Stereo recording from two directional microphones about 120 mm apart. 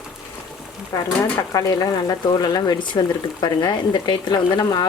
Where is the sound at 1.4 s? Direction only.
25° left (ahead or behind).